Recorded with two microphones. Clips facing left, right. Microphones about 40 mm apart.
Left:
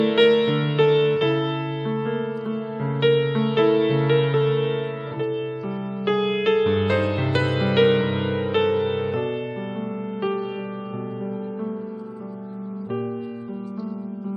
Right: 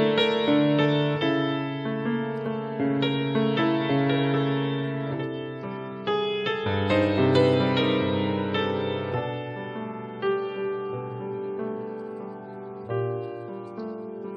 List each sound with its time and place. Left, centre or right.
0.1 s music: centre
0.5 s music: centre
0.7 s music: centre
6.0 s music: left; by 7.1 s centre
7.4 s music: left
7.9 s music: centre